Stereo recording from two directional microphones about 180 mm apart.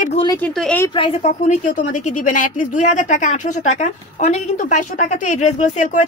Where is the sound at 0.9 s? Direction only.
35° left (ahead or behind).